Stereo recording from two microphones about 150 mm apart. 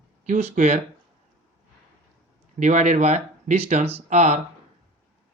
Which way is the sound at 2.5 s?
55° right (ahead or behind).